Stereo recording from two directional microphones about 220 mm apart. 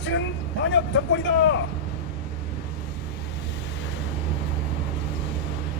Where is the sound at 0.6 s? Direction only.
55° left (ahead or behind).